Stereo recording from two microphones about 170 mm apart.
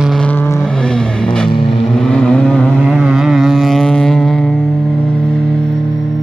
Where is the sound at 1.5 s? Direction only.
30° left (ahead or behind).